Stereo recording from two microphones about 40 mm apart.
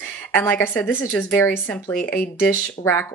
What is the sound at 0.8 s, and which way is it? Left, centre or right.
A woman's voice, left.